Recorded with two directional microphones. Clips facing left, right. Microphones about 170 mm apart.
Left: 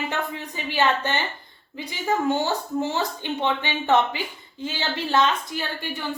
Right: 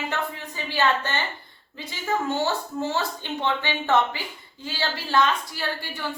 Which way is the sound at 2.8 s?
15° left (ahead or behind).